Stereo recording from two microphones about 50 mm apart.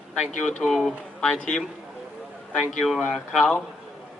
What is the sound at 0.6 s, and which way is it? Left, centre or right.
Speech, centre.